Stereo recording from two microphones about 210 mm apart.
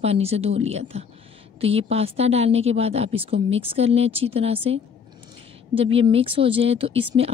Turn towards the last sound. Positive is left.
turn(degrees=-25)  # may be behind; listen again after turning